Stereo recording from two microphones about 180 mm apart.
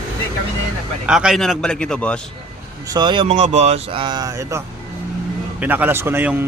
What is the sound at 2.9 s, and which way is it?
Speech, 25° right (ahead or behind).